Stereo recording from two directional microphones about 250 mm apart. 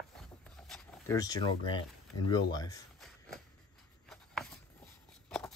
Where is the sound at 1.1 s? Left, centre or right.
Centre.